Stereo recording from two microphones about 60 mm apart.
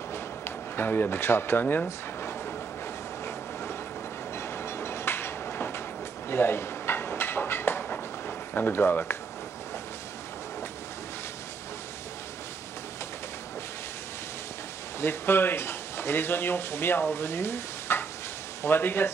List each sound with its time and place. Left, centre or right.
0.7 s speech: left
4.4 s train: left
6.2 s a sound: left
15.0 s speech: left